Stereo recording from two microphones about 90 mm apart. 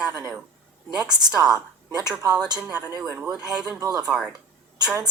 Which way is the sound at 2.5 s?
15° right (ahead or behind).